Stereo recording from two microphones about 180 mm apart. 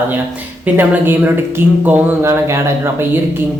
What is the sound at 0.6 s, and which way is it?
Speech, 10° right (ahead or behind).